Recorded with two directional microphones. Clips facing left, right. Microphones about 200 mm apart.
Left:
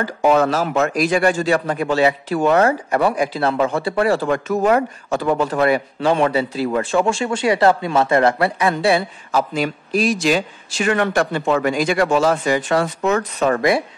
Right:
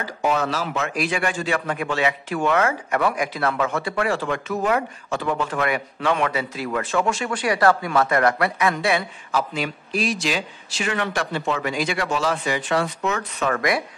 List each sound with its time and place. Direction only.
0.0 s speech: 55° left (ahead or behind); by 13.8 s 30° left (ahead or behind)